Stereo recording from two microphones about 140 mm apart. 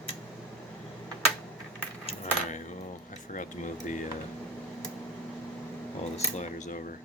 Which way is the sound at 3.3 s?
65° left (ahead or behind).